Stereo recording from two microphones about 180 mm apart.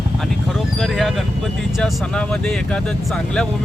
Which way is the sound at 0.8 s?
Centre (ahead or behind).